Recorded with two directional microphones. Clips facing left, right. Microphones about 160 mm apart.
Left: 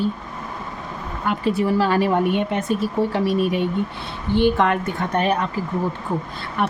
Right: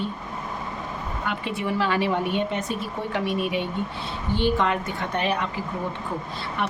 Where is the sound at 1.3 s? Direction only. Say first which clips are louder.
Left 8 dB; 40° left (ahead or behind).